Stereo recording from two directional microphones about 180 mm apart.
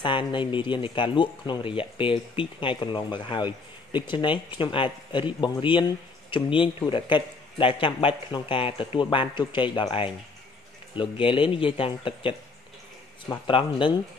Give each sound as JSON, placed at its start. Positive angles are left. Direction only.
{"t": 0.0, "sound": "speech", "side_deg": 25}
{"t": 13.5, "sound": "speech", "side_deg": 30}